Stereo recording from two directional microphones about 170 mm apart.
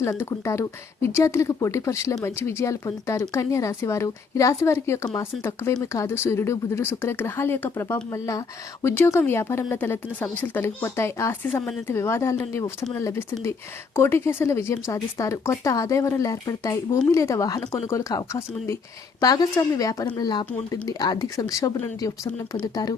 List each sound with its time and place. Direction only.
0.0 s speech: 15° left (ahead or behind)